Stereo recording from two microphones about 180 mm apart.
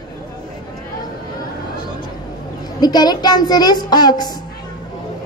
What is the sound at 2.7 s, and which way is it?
A woman's voice, 25° left (ahead or behind).